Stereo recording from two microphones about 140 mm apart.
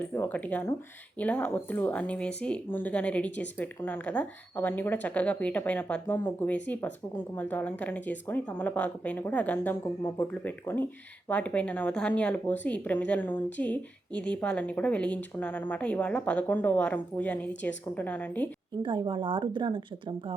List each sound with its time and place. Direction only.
0.1 s speech: 15° left (ahead or behind)
18.8 s a woman's voice: 35° right (ahead or behind)